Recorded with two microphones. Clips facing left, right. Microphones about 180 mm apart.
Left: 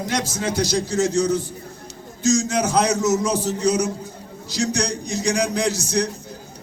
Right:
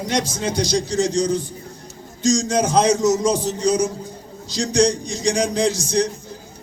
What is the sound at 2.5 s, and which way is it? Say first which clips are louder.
A man's voice: right 3 dB; 20° right (ahead or behind).